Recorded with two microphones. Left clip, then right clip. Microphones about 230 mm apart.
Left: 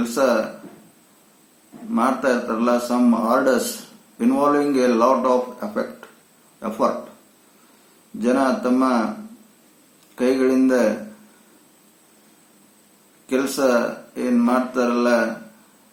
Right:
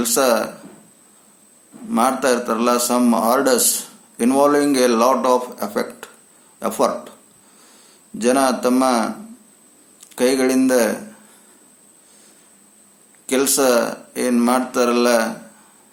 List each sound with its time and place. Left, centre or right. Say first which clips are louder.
0.1 s a man's voice: right 2 dB; right
1.9 s a man's voice: right 3 dB; right
8.2 s a man's voice: right 3 dB; right
10.2 s a man's voice: right 2 dB; right
13.2 s a man's voice: right 3 dB; right